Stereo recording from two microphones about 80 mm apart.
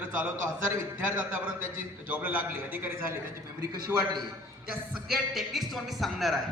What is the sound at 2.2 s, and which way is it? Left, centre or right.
Speech, right.